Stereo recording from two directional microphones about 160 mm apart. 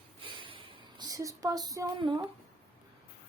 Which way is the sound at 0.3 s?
30° right (ahead or behind).